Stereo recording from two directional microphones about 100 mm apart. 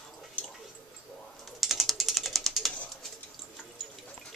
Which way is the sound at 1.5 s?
Centre (ahead or behind).